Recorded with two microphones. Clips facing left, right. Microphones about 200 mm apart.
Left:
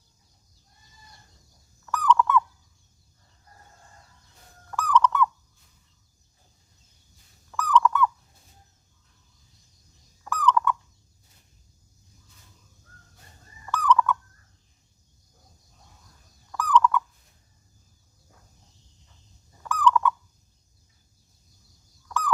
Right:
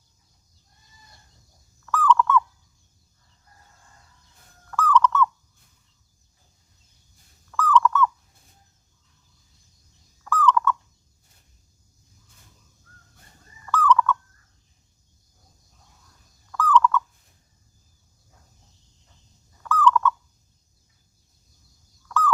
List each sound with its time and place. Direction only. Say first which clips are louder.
1.9 s owl: right 2 dB; 15° left (ahead or behind)
4.7 s owl: right 2 dB; 15° left (ahead or behind)
7.5 s owl: right 2 dB; 15° left (ahead or behind)
10.2 s turkey: right 2 dB; 15° left (ahead or behind)
13.7 s fowl: right 2 dB; 15° left (ahead or behind)
16.5 s fowl: right 2 dB; 15° left (ahead or behind)
19.6 s fowl: right 2 dB; 15° left (ahead or behind)